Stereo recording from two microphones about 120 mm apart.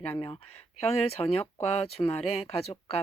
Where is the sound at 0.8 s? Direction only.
55° left (ahead or behind).